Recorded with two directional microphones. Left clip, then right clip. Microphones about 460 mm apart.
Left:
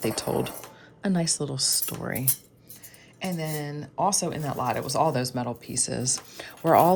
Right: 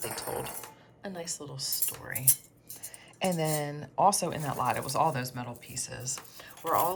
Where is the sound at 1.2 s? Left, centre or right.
Centre.